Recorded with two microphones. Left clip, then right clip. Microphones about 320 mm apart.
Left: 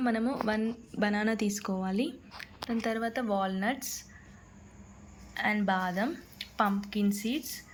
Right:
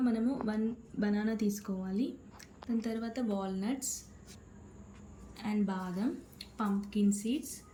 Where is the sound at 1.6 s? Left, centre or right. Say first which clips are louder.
Left 7 dB; centre.